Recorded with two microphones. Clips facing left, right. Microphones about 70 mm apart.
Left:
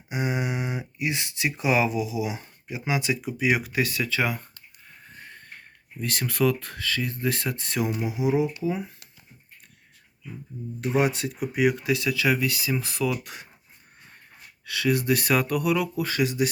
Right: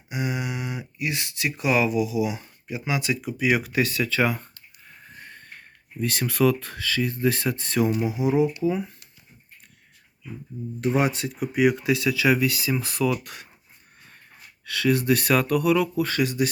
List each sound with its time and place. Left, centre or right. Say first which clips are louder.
0.1 s speech: left 1 dB; left; by 4.4 s centre
6.0 s speech: right 3 dB; centre
10.8 s speech: right 1 dB; centre
13.2 s speech: even; left
14.6 s speech: right 2 dB; centre